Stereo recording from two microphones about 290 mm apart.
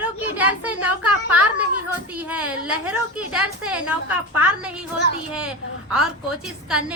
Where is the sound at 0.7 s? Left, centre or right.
Right.